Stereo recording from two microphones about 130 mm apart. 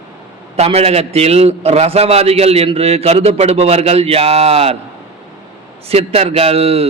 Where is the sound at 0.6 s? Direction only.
50° right (ahead or behind).